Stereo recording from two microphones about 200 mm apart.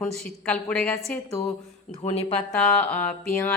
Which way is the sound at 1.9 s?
30° left (ahead or behind).